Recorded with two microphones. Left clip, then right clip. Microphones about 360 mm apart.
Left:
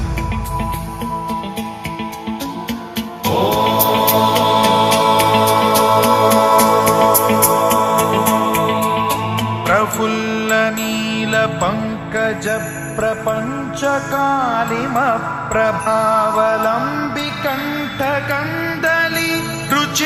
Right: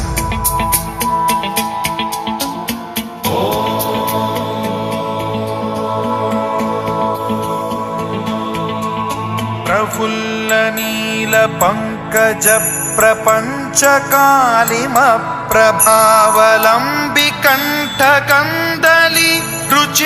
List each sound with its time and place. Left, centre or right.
3.2 s music: centre; by 7.7 s left
7.7 s music: left; by 9.1 s centre
9.6 s music: centre
11.2 s music: centre
13.8 s music: right; by 20.0 s centre